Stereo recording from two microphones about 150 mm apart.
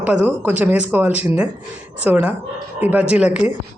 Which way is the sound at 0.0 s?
10° right (ahead or behind).